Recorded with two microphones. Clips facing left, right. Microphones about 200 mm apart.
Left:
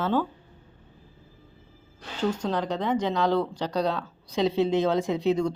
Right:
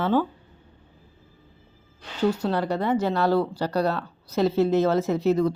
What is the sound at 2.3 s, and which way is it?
Speech, 10° right (ahead or behind).